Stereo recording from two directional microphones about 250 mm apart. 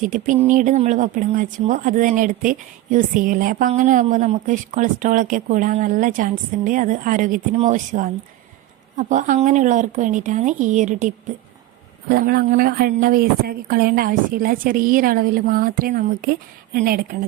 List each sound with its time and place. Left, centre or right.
0.3 s speech: right